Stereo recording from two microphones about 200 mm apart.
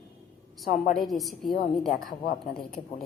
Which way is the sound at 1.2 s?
Centre (ahead or behind).